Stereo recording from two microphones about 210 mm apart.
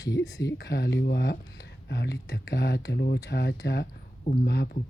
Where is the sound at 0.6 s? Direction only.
55° left (ahead or behind).